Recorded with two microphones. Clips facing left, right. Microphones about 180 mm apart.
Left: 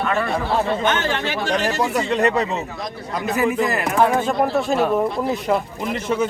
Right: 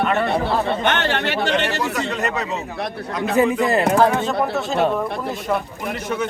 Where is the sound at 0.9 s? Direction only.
65° right (ahead or behind).